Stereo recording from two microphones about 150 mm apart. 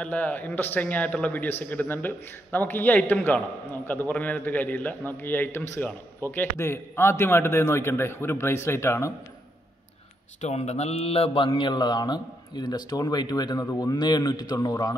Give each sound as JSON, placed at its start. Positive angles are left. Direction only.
{"t": 0.0, "sound": "a man's voice", "side_deg": 10}
{"t": 10.4, "sound": "mantra", "side_deg": 45}